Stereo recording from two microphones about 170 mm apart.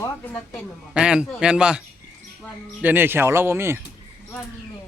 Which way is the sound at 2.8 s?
10° right (ahead or behind).